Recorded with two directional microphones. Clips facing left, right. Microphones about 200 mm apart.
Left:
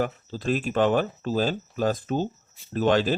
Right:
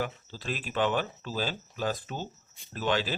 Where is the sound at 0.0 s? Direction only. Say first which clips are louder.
Left 7 dB; 45° left (ahead or behind).